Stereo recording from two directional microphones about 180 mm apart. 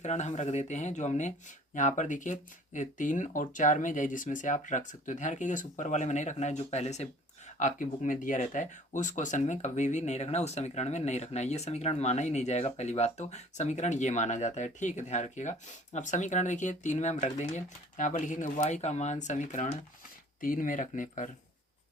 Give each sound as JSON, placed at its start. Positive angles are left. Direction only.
{"t": 0.0, "sound": "speech", "side_deg": 40}